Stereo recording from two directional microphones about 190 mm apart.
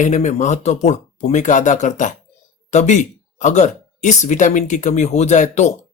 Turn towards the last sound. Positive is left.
turn(degrees=40)  # may be behind; listen again after turning